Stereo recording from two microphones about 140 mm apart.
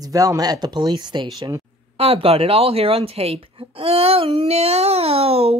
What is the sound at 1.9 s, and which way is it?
Speech, 45° right (ahead or behind).